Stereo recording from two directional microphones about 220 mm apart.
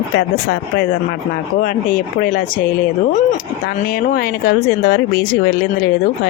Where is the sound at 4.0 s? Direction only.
40° left (ahead or behind).